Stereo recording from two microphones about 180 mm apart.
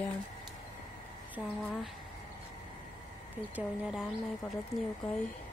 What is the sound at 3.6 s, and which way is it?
Speech, 5° right (ahead or behind).